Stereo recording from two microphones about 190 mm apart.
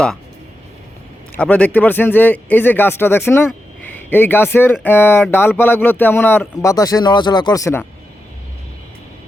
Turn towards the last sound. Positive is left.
turn(degrees=15)  # may be behind; listen again after turning